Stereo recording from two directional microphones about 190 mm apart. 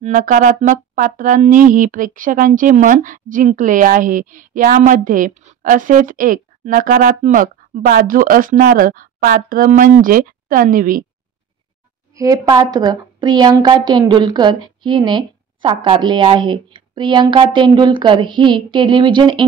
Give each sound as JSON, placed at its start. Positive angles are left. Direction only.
{"t": 0.0, "sound": "speech", "side_deg": -45}
{"t": 12.1, "sound": "a woman's voice", "side_deg": -20}